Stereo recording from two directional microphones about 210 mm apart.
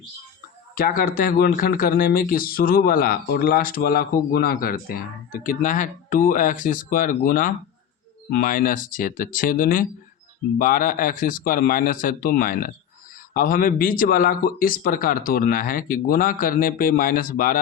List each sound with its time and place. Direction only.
0.8 s a man's voice: 40° left (ahead or behind)